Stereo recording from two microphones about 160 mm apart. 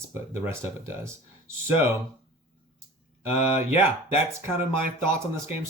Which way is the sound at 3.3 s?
15° right (ahead or behind).